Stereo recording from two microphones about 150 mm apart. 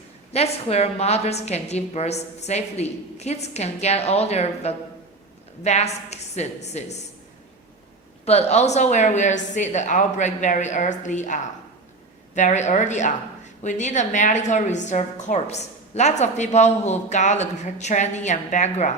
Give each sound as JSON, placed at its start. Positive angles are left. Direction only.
{"t": 0.3, "sound": "a woman's voice", "side_deg": 45}
{"t": 8.2, "sound": "a woman's voice", "side_deg": 45}